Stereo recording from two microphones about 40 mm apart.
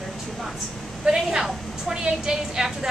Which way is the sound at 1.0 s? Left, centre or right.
Centre.